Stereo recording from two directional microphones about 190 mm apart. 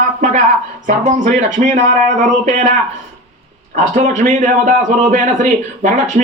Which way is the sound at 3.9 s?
40° right (ahead or behind).